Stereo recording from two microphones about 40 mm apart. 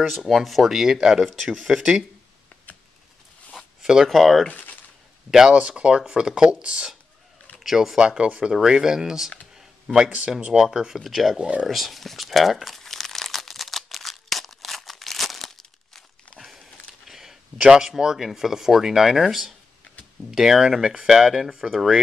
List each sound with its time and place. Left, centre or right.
0.3 s speech: centre
3.8 s speech: centre
4.1 s speech: centre
4.5 s a sound: left
5.3 s speech: centre
5.6 s speech: right
7.6 s speech: centre
8.0 s speech: centre
10.5 s speech: centre
11.3 s speech: right
11.6 s speech: centre
12.7 s crumpling: centre
16.3 s a sound: centre
17.0 s speech: centre